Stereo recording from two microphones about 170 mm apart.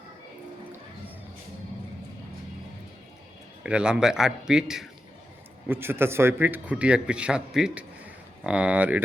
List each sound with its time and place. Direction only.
3.6 s a man's voice: 5° right (ahead or behind)